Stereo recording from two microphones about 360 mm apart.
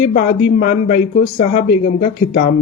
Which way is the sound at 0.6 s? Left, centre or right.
Centre.